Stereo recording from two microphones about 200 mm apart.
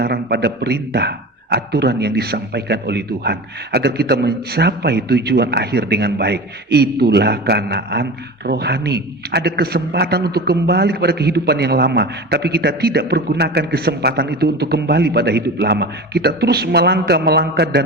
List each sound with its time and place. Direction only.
0.0 s a man's voice: 50° right (ahead or behind)